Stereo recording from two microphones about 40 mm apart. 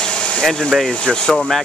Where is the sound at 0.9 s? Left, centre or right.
Left.